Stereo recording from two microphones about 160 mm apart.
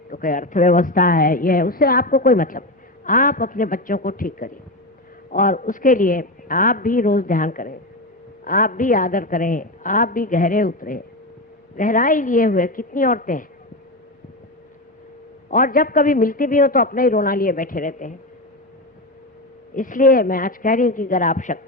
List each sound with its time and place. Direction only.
0.1 s a woman's voice: 60° left (ahead or behind)
15.4 s a woman's voice: 60° left (ahead or behind)
19.7 s a woman's voice: 55° left (ahead or behind)